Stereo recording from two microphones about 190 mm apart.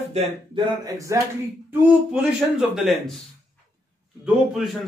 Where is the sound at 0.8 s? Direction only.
15° right (ahead or behind).